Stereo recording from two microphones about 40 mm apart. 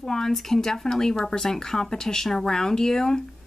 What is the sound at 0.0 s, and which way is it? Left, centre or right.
A woman's voice, centre.